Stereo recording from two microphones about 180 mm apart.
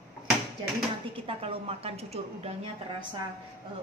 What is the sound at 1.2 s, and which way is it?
A woman's voice, 30° right (ahead or behind).